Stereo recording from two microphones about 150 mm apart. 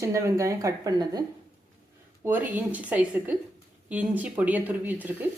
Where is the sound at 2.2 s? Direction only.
10° right (ahead or behind).